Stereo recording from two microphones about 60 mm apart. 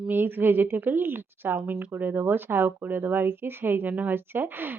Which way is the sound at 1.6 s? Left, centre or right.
Right.